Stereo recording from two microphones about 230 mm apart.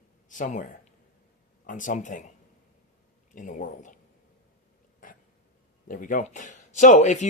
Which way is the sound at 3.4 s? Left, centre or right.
Left.